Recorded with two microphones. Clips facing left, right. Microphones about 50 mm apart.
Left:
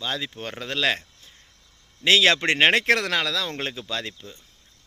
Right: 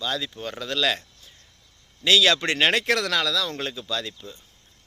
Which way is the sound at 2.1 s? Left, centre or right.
Left.